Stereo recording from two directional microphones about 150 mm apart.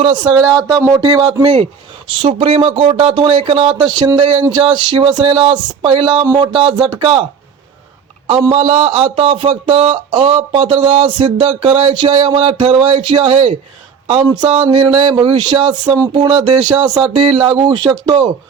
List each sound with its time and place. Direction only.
0.0 s a man's voice: 30° right (ahead or behind)
6.2 s a man's voice: 25° right (ahead or behind)
8.3 s a man's voice: 35° right (ahead or behind)
17.6 s speech: 30° right (ahead or behind)